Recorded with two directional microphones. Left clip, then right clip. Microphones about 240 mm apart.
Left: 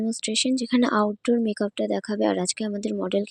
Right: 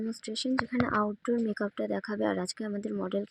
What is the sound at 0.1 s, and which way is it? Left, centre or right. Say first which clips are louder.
Speech: left 10 dB; left.